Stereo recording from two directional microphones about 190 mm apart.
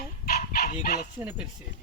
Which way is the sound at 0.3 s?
55° left (ahead or behind).